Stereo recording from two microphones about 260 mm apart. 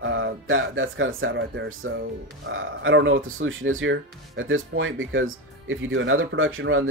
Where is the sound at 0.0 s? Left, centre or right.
Right.